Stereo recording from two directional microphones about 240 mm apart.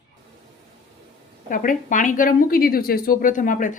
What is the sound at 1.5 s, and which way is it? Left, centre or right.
A woman's voice, left.